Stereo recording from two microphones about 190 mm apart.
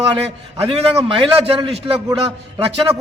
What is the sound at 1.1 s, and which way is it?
A man's voice, 25° right (ahead or behind).